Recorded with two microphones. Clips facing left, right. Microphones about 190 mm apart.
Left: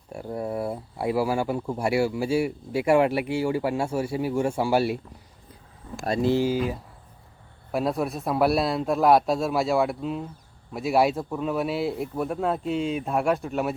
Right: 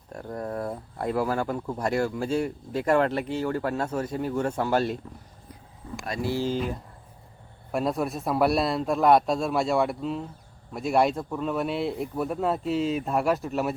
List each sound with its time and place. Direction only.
0.1 s speech: 10° left (ahead or behind)
6.1 s speech: 20° left (ahead or behind)
6.5 s speech: 5° left (ahead or behind)